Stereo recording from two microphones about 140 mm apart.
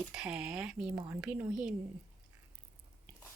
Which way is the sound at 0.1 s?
5° right (ahead or behind).